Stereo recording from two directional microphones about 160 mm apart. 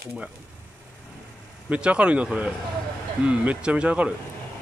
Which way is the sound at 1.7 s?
10° right (ahead or behind).